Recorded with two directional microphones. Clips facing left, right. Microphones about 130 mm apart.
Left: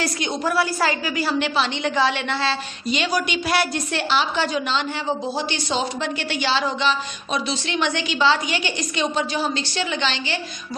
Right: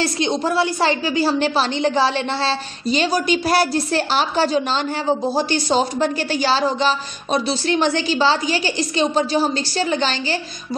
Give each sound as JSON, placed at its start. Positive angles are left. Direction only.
{"t": 0.0, "sound": "a woman's voice", "side_deg": -25}